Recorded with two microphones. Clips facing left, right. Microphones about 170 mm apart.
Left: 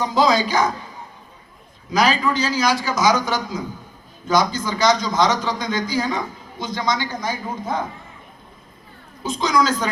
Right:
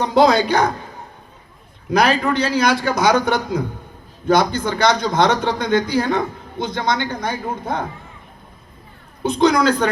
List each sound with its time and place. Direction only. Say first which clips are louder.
0.0 s a man's voice: right 4 dB; 60° right (ahead or behind)
1.9 s a man's voice: right 2 dB; 60° right (ahead or behind)
9.2 s a man's voice: right 5 dB; 60° right (ahead or behind)